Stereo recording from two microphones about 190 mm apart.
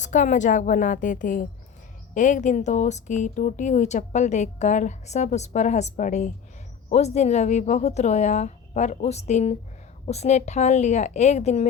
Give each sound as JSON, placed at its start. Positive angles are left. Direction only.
{"t": 0.0, "sound": "a woman's voice", "side_deg": 40}